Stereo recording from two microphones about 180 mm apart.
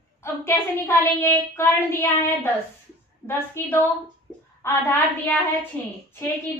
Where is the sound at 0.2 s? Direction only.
15° left (ahead or behind).